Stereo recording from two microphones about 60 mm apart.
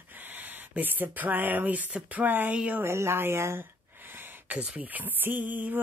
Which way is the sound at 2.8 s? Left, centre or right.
Right.